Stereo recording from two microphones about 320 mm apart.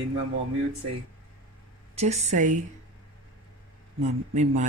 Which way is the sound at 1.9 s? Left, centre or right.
Right.